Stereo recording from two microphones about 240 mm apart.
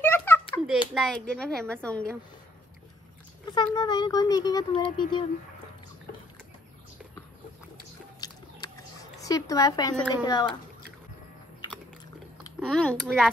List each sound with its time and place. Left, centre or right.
0.0 s a sound: centre
0.9 s a woman's voice: centre
3.4 s speech: centre
8.2 s a sound: centre
9.2 s speech: centre
12.5 s a woman's voice: centre